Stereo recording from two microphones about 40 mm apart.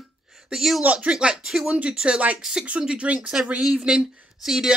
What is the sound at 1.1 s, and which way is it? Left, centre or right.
Speech, right.